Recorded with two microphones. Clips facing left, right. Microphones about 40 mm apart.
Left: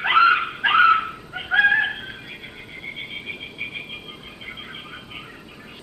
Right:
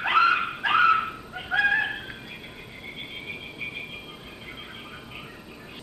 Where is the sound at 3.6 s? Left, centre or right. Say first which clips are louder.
Left 3 dB; left.